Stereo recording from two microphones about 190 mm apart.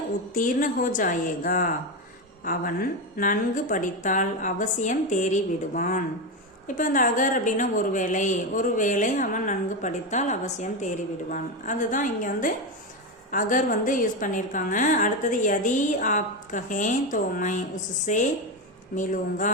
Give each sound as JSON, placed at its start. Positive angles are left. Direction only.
{"t": 0.3, "sound": "a woman's voice", "side_deg": 45}